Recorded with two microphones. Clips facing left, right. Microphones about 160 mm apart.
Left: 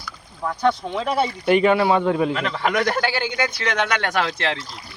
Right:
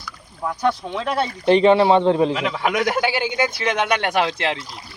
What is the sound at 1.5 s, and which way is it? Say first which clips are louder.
Speech: right 4 dB; 30° right (ahead or behind).